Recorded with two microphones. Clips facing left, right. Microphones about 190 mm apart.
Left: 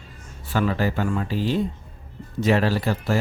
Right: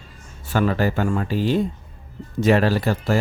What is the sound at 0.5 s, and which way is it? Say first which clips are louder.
Speech: right 3 dB; 50° right (ahead or behind).